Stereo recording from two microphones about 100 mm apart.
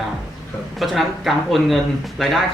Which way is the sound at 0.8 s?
Centre (ahead or behind).